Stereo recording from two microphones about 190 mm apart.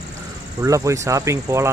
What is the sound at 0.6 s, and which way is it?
Speech, 15° right (ahead or behind).